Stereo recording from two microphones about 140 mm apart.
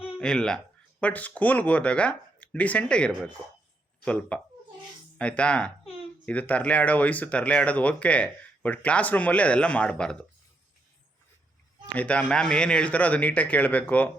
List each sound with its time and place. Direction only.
0.2 s speech: 5° left (ahead or behind)
5.8 s a sound: 45° left (ahead or behind)
6.2 s speech: 10° left (ahead or behind)
11.9 s speech: 10° left (ahead or behind)